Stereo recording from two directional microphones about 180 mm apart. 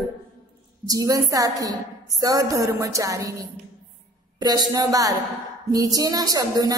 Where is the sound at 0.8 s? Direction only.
20° right (ahead or behind).